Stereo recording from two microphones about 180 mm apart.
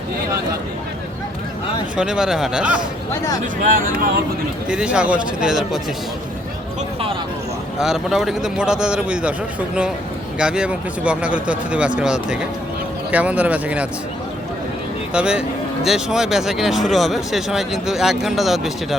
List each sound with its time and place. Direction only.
2.0 s speech: 5° right (ahead or behind)
3.4 s speech: 50° right (ahead or behind)
4.7 s speech: 5° right (ahead or behind)
7.8 s speech: 5° right (ahead or behind)
10.3 s speech: 5° right (ahead or behind)
15.1 s speech: 5° right (ahead or behind)